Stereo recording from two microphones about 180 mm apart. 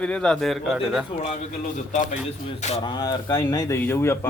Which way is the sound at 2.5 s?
35° left (ahead or behind).